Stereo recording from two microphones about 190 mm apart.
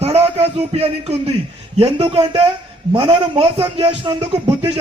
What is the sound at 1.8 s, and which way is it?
A man's voice, 30° right (ahead or behind).